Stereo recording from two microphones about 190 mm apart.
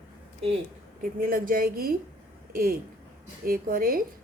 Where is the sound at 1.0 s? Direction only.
50° right (ahead or behind).